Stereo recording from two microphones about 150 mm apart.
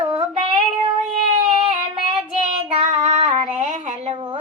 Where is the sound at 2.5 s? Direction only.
50° right (ahead or behind).